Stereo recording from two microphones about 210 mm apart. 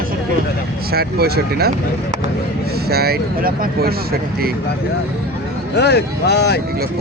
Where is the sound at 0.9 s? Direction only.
50° right (ahead or behind).